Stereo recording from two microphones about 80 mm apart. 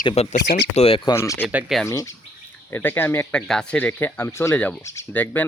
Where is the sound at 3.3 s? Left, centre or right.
Centre.